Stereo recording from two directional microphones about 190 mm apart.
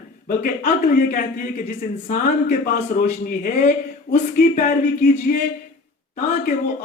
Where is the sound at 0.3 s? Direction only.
50° left (ahead or behind).